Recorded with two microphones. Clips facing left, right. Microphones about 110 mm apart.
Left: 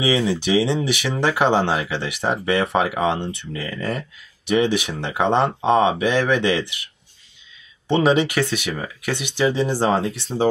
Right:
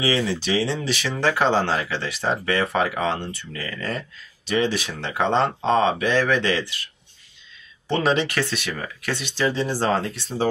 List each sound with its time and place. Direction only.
0.0 s speech: 15° left (ahead or behind)
7.9 s speech: 15° left (ahead or behind)